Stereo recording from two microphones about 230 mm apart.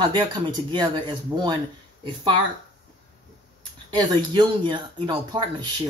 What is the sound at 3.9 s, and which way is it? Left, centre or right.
Speech, right.